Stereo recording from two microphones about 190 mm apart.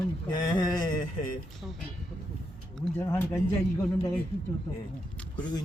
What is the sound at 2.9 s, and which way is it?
Speech, 10° left (ahead or behind).